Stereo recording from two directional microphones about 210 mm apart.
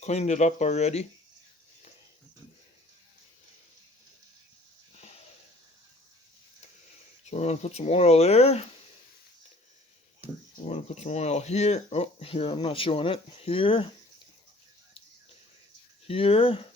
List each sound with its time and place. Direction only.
0.0 s speech: 30° left (ahead or behind)
7.3 s speech: 30° left (ahead or behind)
10.5 s speech: 35° left (ahead or behind)
16.0 s speech: 25° left (ahead or behind)